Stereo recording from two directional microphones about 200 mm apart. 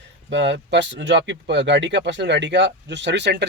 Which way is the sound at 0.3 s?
65° right (ahead or behind).